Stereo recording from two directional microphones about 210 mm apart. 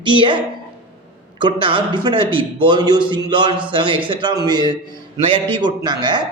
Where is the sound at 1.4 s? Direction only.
20° right (ahead or behind).